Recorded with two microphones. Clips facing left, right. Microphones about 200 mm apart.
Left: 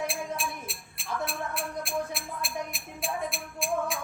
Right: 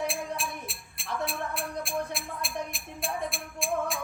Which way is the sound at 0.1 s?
Centre (ahead or behind).